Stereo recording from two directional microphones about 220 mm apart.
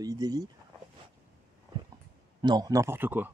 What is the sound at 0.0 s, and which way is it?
Speech, 15° right (ahead or behind).